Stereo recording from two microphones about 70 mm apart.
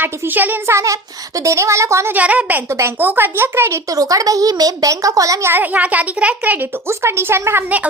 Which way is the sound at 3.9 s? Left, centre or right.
Right.